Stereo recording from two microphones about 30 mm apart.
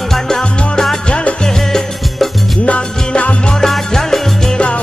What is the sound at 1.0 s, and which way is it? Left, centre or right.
Music, left.